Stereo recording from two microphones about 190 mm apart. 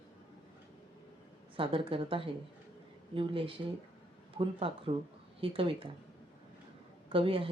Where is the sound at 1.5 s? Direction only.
30° right (ahead or behind).